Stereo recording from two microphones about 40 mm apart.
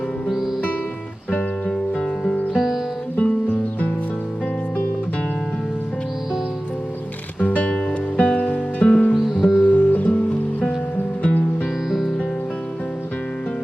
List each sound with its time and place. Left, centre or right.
0.3 s music: centre
1.3 s music: left
1.7 s music: centre
2.5 s music: centre
3.2 s music: left
7.3 s music: left
9.1 s music: centre
9.6 s music: left
11.9 s music: centre